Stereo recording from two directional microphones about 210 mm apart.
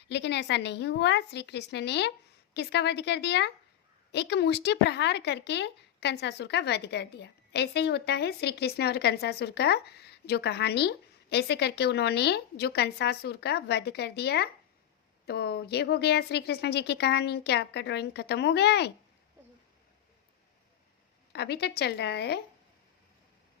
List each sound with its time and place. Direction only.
0.1 s speech: 55° left (ahead or behind)
21.3 s speech: 50° left (ahead or behind)